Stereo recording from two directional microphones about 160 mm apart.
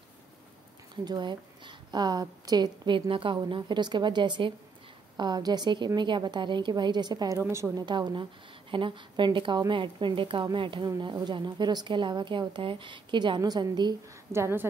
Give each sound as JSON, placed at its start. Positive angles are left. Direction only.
{"t": 1.0, "sound": "a woman's voice", "side_deg": -25}
{"t": 14.3, "sound": "a woman's voice", "side_deg": -15}